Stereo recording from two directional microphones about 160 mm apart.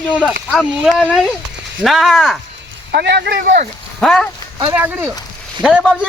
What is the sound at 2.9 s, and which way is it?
Speech, 90° right.